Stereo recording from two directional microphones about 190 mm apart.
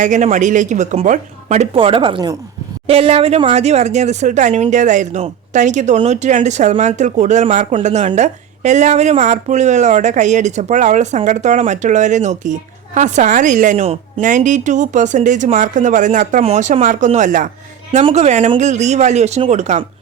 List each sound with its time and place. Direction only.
0.0 s speech: 40° right (ahead or behind)